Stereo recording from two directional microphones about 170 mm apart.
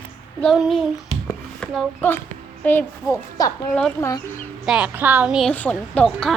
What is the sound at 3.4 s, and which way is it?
Speech, 20° left (ahead or behind).